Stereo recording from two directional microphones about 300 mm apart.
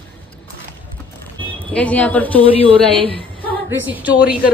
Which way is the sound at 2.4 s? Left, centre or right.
Centre.